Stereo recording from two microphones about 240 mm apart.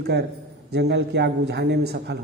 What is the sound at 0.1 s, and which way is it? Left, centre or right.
A woman's voice, right.